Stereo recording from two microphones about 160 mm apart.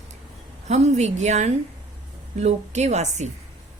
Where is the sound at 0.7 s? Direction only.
45° right (ahead or behind).